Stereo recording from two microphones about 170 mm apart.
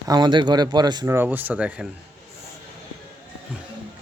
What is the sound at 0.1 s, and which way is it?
Speech, 25° right (ahead or behind).